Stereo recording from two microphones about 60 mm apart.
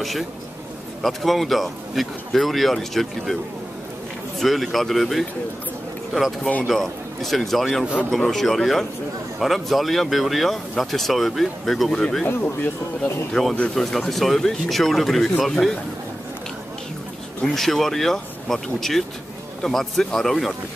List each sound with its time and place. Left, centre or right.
1.0 s speech: centre
4.4 s speech: centre
12.3 s speech: left
13.3 s a man's voice: centre
17.6 s speech: centre